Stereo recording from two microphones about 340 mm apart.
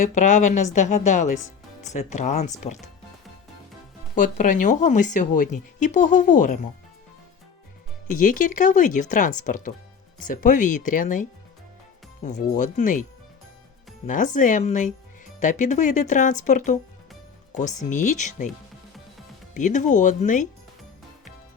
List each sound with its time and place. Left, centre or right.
0.0 s speech: left
4.1 s speech: left
8.1 s speech: left
14.1 s speech: left
19.5 s speech: left